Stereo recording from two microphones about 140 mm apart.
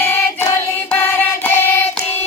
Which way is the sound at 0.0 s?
15° left (ahead or behind).